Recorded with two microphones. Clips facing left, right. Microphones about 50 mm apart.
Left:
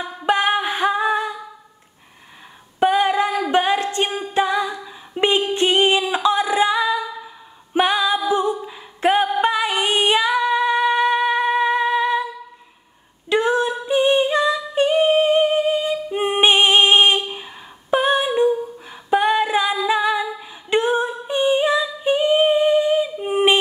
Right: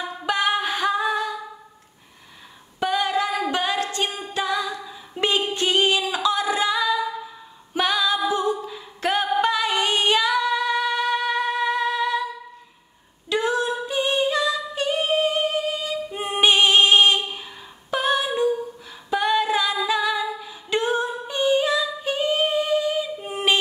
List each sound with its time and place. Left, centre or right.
0.3 s a capella: left
2.8 s female singing: left
4.3 s singing: left
7.7 s music: left
8.3 s a capella: left
13.3 s female singing: left
17.9 s humming: left
19.9 s singing: left